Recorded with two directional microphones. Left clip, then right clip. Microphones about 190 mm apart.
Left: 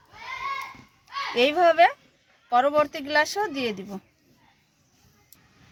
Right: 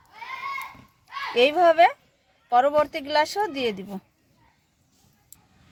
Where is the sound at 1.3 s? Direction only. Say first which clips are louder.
Right 2 dB; 20° right (ahead or behind).